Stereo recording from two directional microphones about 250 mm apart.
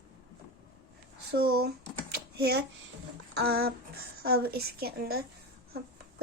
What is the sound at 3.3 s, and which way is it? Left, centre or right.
Speech, right.